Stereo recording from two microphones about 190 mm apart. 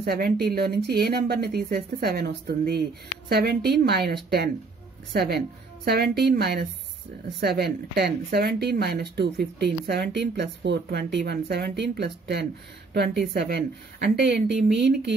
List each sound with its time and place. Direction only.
0.0 s speech: 55° right (ahead or behind)